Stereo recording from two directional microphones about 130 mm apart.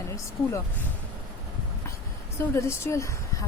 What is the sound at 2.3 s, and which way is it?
Speech, 20° left (ahead or behind).